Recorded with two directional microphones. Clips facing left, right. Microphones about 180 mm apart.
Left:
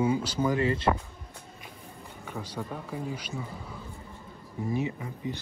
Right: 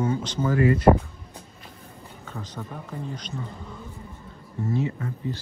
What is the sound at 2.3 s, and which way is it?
Speech, 10° left (ahead or behind).